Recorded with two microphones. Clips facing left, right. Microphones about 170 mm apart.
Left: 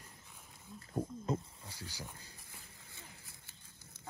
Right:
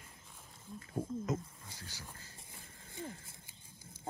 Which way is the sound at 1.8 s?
15° left (ahead or behind).